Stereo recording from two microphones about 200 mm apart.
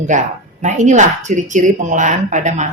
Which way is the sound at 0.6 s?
35° right (ahead or behind).